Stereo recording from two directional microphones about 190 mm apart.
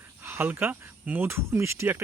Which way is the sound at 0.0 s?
10° right (ahead or behind).